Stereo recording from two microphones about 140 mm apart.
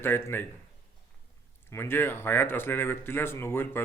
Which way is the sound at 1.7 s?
15° left (ahead or behind).